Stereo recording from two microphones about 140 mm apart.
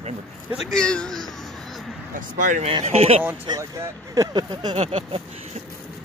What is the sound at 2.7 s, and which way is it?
Speech, 45° right (ahead or behind).